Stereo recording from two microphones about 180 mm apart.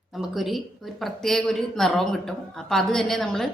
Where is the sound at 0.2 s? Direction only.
Centre (ahead or behind).